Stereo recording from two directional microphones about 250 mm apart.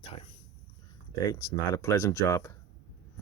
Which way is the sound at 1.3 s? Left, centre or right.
Centre.